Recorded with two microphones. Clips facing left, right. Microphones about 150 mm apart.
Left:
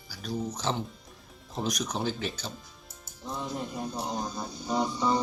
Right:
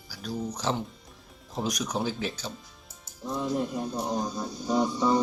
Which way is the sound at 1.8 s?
5° right (ahead or behind).